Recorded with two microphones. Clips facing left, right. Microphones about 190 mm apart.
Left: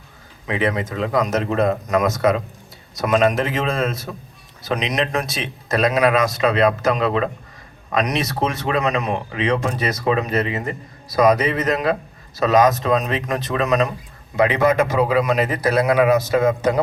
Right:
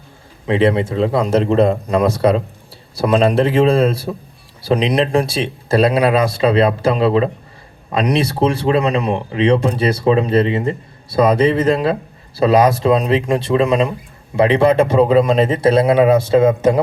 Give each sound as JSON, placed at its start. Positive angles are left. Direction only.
{"t": 0.4, "sound": "speech", "side_deg": -30}